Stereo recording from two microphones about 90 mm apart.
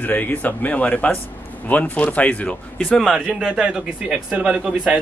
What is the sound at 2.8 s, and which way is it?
A man's voice, 5° right (ahead or behind).